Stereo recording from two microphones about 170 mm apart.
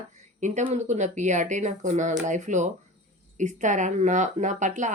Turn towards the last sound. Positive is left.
turn(degrees=-45)  # may be behind; listen again after turning